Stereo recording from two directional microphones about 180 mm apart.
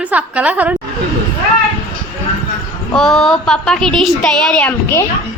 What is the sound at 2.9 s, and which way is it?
A woman's voice, 5° left (ahead or behind).